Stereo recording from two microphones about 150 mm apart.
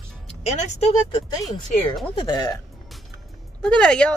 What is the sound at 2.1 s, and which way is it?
Speech, 30° left (ahead or behind).